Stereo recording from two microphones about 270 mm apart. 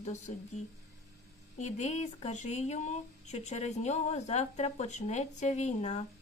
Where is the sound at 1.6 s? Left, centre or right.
Left.